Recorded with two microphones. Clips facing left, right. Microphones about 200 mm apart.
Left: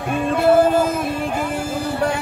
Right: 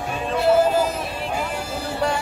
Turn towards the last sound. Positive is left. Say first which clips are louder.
# left 3 dB
turn(degrees=50)  # may be behind; listen again after turning